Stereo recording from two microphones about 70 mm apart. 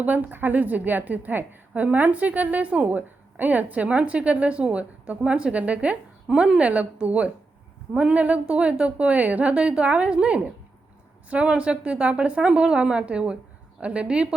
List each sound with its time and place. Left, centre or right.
0.0 s a woman's voice: right